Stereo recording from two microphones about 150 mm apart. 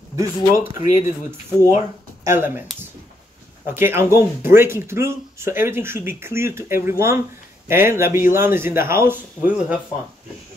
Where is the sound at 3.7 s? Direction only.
15° right (ahead or behind).